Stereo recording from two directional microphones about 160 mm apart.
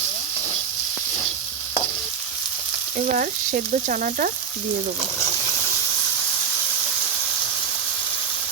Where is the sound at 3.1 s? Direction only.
55° right (ahead or behind).